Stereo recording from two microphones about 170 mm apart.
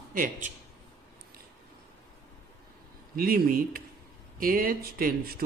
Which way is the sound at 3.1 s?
60° right (ahead or behind).